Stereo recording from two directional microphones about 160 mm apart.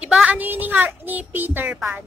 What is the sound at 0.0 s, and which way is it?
A child's voice, 5° right (ahead or behind).